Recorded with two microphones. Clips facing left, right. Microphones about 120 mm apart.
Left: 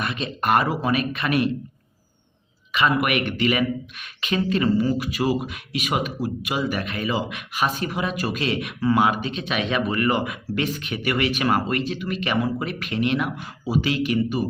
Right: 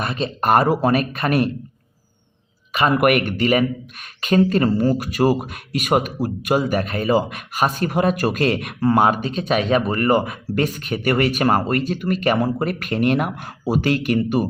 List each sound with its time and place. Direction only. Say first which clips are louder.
0.0 s speech: right 4 dB; 35° right (ahead or behind)
2.7 s speech: right 5 dB; 45° right (ahead or behind)